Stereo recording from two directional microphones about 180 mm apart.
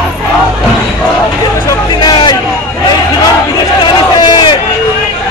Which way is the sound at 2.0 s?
25° left (ahead or behind).